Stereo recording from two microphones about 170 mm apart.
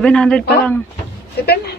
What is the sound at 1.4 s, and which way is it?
Speech, 70° left (ahead or behind).